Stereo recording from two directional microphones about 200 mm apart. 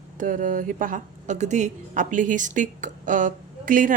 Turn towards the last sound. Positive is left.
turn(degrees=-40)  # may be behind; listen again after turning